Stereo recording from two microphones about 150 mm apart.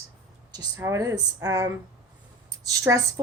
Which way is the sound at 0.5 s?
20° right (ahead or behind).